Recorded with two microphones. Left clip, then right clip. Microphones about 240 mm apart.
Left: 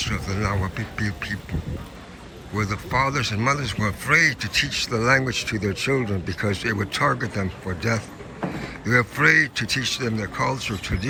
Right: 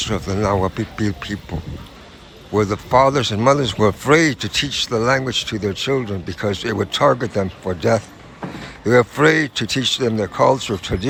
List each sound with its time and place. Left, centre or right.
0.0 s speech: centre
2.6 s speech: centre